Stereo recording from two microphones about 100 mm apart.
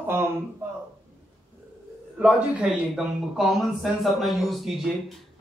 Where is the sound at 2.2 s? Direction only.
10° right (ahead or behind).